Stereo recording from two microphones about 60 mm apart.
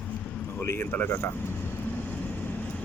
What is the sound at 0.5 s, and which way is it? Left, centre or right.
Speech, left.